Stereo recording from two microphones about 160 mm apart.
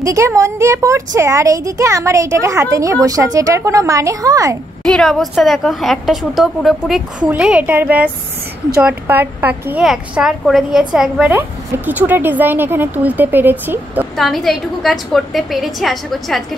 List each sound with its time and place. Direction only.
0.0 s speech: 20° right (ahead or behind)
4.8 s a woman's voice: 5° left (ahead or behind); by 14.0 s 15° right (ahead or behind)
14.1 s a woman's voice: centre (ahead or behind)